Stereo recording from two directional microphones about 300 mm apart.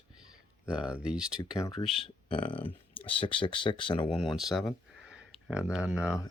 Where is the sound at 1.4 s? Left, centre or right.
Centre.